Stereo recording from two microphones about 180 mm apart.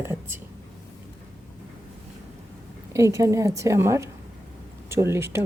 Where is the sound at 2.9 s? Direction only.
15° right (ahead or behind).